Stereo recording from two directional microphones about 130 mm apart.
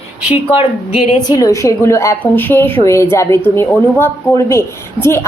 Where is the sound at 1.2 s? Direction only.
30° left (ahead or behind).